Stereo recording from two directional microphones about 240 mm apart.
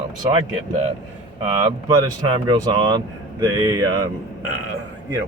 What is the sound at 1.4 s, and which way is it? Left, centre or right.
A man's voice, right.